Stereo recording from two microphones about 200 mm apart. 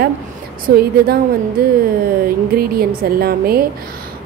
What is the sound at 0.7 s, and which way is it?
A woman's voice, 50° right (ahead or behind).